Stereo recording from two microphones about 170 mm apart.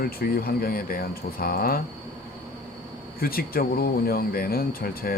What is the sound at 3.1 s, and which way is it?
Speech, 60° left (ahead or behind).